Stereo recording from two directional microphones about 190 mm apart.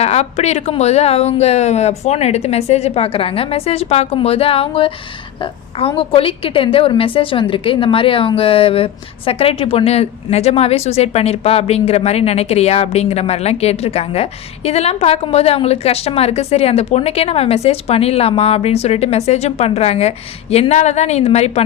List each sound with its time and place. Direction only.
0.0 s a woman's voice: 35° left (ahead or behind)